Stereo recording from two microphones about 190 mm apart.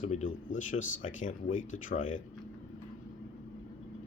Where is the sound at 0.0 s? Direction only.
40° left (ahead or behind).